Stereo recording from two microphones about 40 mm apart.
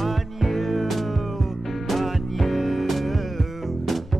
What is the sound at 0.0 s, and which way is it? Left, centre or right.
Music, centre.